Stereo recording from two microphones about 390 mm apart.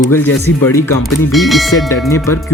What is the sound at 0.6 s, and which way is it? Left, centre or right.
Speech, centre.